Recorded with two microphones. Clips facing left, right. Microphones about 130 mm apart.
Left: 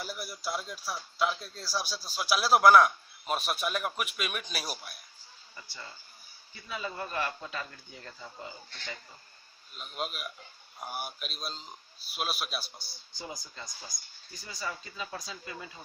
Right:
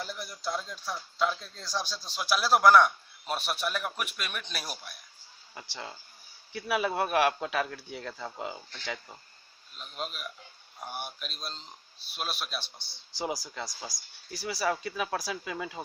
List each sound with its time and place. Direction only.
0.0 s a man's voice: 5° left (ahead or behind)
5.5 s speech: 85° right
9.7 s a man's voice: 5° left (ahead or behind)
13.1 s speech: 90° right